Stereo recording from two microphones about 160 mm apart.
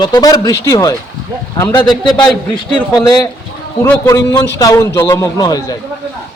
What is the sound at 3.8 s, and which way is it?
A man's voice, 20° left (ahead or behind).